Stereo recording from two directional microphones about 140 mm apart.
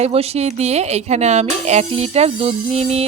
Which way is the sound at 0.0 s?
45° right (ahead or behind).